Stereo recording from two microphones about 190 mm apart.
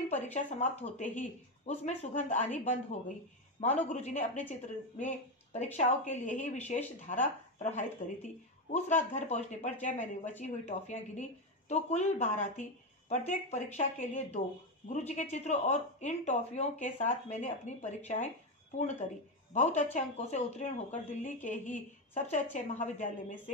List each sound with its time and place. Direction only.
0.3 s speech: 40° left (ahead or behind)